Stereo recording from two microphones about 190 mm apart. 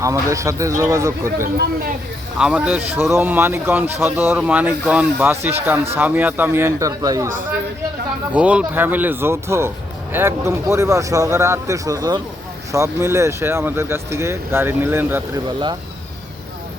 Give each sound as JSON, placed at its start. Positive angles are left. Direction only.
{"t": 0.0, "sound": "speech", "side_deg": -15}
{"t": 8.3, "sound": "speech", "side_deg": -5}